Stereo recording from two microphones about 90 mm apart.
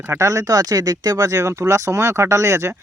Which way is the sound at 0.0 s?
30° right (ahead or behind).